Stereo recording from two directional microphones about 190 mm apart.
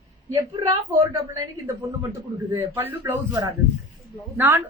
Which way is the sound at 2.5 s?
10° right (ahead or behind).